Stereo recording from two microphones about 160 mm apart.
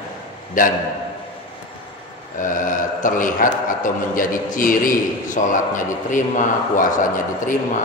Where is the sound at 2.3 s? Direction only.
55° left (ahead or behind).